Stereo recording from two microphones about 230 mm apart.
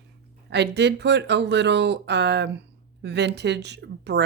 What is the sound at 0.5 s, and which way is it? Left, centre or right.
Speech, right.